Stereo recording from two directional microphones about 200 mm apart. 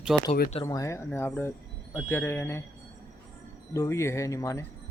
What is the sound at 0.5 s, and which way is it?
Speech, 20° left (ahead or behind).